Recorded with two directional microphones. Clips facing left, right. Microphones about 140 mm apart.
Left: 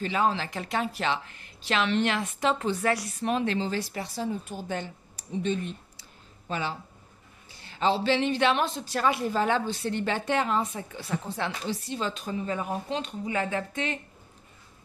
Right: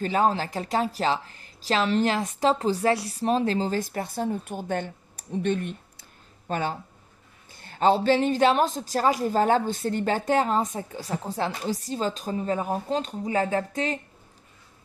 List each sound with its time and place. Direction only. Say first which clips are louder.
0.0 s a woman's voice: right 3 dB; 40° right (ahead or behind)